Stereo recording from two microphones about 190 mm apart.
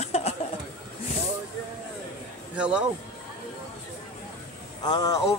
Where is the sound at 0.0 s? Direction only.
35° left (ahead or behind).